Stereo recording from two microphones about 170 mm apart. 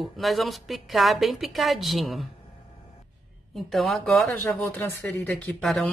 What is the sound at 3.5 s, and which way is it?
Speech, centre (ahead or behind).